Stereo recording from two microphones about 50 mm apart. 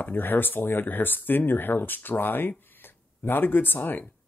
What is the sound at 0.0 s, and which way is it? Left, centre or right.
Speech, left.